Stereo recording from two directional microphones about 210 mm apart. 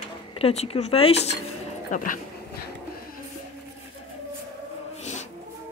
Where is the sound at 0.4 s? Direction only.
30° left (ahead or behind).